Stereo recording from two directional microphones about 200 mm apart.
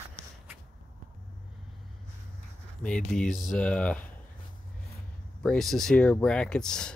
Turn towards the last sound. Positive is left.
turn(degrees=5)  # may be behind; listen again after turning